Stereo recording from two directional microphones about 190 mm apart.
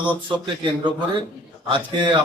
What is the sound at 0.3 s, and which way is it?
Speech, 25° right (ahead or behind).